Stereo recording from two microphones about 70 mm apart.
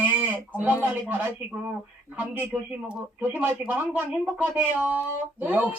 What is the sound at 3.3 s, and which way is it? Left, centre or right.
Speech, right.